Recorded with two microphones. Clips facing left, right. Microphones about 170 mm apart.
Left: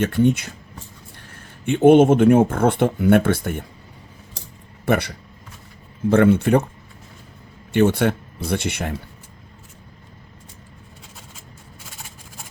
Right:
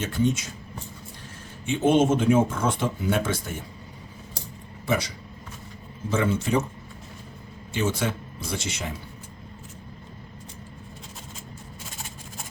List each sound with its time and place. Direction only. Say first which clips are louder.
0.0 s speech: left 7 dB; 60° left (ahead or behind)
1.6 s speech: left 8 dB; 60° left (ahead or behind)
4.9 s speech: left 6 dB; 60° left (ahead or behind)
7.7 s speech: left 9 dB; 60° left (ahead or behind)